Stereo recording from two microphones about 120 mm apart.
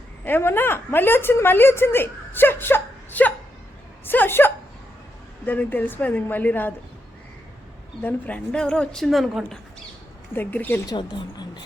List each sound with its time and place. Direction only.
0.3 s a woman's voice: 20° left (ahead or behind)
8.0 s a woman's voice: 10° left (ahead or behind)
10.3 s a woman's voice: 15° left (ahead or behind)
10.8 s a woman's voice: 40° left (ahead or behind)